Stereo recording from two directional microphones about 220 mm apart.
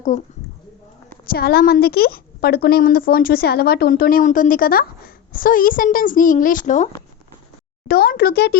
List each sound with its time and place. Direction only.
0.1 s a woman's voice: 35° left (ahead or behind)
1.3 s a woman's voice: 45° left (ahead or behind)
7.9 s a child's voice: 45° left (ahead or behind)